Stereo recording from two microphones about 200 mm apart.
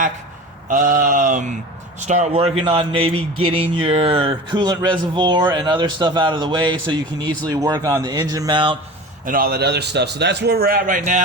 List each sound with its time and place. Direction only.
0.7 s a sound: 40° right (ahead or behind)
2.0 s speech: 35° right (ahead or behind)
9.2 s a man's voice: 45° right (ahead or behind)